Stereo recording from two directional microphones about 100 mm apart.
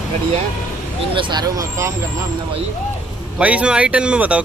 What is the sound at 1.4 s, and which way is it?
Speech, 35° right (ahead or behind).